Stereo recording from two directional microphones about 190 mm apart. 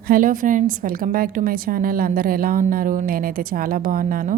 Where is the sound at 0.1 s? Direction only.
45° right (ahead or behind).